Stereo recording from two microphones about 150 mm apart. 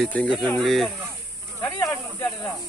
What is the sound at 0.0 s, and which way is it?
Speech, 5° left (ahead or behind).